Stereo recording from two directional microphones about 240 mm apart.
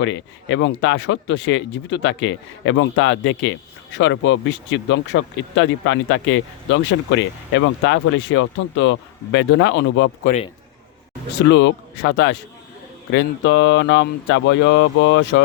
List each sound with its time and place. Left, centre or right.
0.0 s speech: left
11.4 s speech: left